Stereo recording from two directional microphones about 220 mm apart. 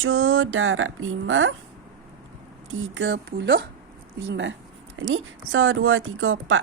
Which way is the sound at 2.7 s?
60° right (ahead or behind).